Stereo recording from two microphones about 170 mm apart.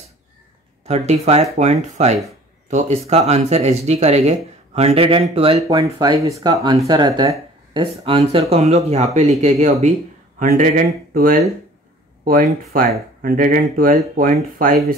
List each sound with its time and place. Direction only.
0.8 s speech: 40° right (ahead or behind)
5.6 s speech: 25° right (ahead or behind); by 9.9 s 40° right (ahead or behind)
10.4 s speech: 55° right (ahead or behind)
12.7 s speech: 55° right (ahead or behind)